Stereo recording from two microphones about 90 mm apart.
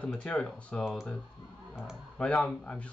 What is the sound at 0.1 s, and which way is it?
Speech, 10° left (ahead or behind).